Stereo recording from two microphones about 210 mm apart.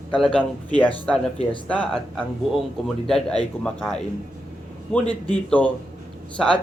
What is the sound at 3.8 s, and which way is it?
Speech, 5° left (ahead or behind).